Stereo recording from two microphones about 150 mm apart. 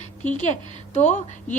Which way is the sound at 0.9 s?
50° left (ahead or behind).